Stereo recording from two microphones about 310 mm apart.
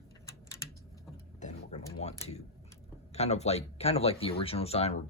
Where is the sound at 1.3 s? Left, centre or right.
Left.